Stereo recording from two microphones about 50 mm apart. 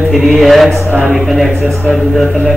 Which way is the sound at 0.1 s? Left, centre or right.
Centre.